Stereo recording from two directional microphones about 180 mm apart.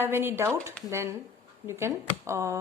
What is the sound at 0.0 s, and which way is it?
Speech, 10° right (ahead or behind).